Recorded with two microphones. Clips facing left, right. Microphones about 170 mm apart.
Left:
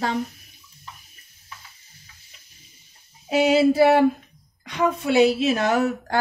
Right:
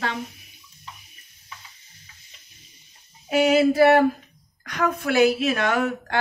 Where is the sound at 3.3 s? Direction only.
30° left (ahead or behind).